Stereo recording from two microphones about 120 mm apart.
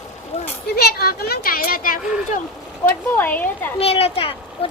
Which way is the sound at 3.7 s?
55° left (ahead or behind).